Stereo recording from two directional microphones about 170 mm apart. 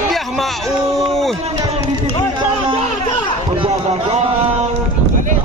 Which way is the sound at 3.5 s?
35° right (ahead or behind).